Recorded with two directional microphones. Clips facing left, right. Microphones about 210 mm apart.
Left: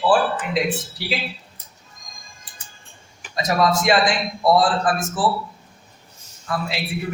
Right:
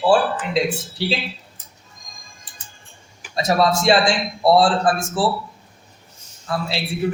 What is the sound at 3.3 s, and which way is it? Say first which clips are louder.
A man's voice: right 2 dB; 30° right (ahead or behind).